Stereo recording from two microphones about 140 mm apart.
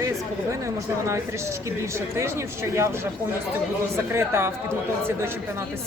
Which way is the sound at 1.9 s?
20° right (ahead or behind).